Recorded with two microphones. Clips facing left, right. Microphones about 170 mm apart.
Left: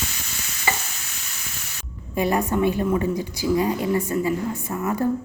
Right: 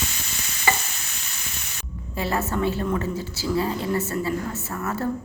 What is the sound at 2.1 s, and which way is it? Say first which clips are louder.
A woman's voice: left 4 dB; 15° left (ahead or behind).